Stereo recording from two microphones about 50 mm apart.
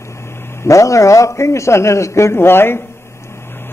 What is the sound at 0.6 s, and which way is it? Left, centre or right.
A man's voice, left.